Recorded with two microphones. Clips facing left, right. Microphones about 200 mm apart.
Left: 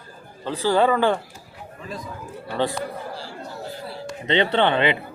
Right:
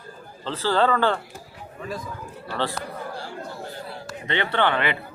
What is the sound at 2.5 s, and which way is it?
Speech, 20° left (ahead or behind).